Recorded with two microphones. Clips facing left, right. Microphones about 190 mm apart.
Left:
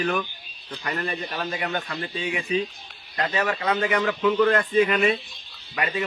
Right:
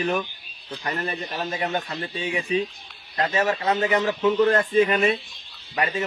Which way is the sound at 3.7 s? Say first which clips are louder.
Even; 25° right (ahead or behind).